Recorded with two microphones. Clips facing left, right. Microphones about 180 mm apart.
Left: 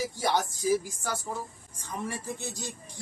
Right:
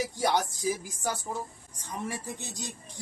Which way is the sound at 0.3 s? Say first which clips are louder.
Left 3 dB; 15° right (ahead or behind).